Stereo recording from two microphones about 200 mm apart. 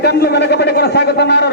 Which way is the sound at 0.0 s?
55° left (ahead or behind).